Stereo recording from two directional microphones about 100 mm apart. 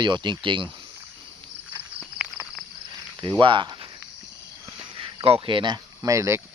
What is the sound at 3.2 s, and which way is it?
Speech, 55° right (ahead or behind).